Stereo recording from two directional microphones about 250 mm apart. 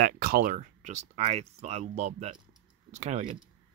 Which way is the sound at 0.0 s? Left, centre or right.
Right.